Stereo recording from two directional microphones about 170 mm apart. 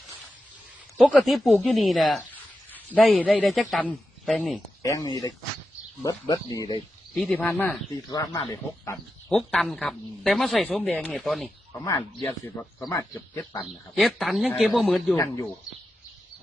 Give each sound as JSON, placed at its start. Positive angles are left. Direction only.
{"t": 0.9, "sound": "speech", "side_deg": 0}
{"t": 4.8, "sound": "speech", "side_deg": 20}
{"t": 7.1, "sound": "speech", "side_deg": 5}
{"t": 8.1, "sound": "speech", "side_deg": 20}
{"t": 9.3, "sound": "speech", "side_deg": 0}
{"t": 11.7, "sound": "speech", "side_deg": 15}
{"t": 13.7, "sound": "speech", "side_deg": 0}